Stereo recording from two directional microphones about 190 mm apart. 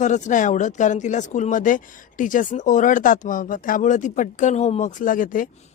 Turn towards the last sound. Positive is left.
turn(degrees=45)  # may be behind; listen again after turning